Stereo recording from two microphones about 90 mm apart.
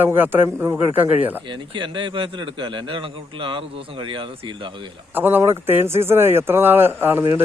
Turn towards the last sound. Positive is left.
turn(degrees=-25)  # may be behind; listen again after turning